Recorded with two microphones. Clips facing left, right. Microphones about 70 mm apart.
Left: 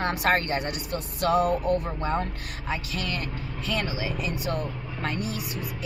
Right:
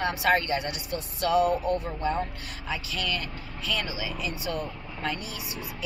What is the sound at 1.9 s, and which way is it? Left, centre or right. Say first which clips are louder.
A woman's voice: left 1 dB; left.